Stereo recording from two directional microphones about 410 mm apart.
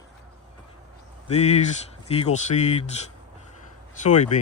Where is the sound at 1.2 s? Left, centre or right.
Centre.